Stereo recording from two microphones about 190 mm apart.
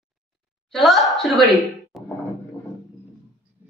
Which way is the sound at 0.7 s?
Centre (ahead or behind).